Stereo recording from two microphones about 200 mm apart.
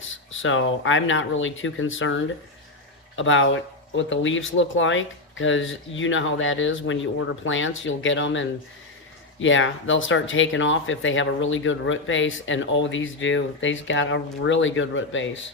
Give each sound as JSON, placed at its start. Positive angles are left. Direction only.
{"t": 0.3, "sound": "speech", "side_deg": 75}